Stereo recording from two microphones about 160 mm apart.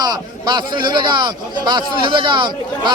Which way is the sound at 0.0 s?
25° right (ahead or behind).